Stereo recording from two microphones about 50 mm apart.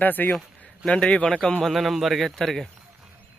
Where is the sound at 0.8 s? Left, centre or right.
Centre.